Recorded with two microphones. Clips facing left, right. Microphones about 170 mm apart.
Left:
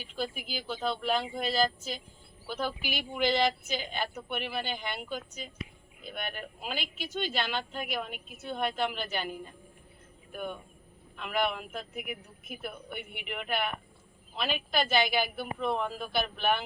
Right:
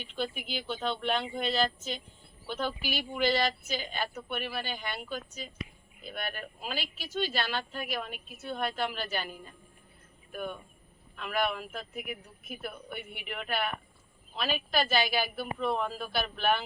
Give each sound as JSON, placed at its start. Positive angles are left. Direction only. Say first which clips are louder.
{"t": 0.5, "sound": "speech", "louder": "left 1 dB", "side_deg": 5}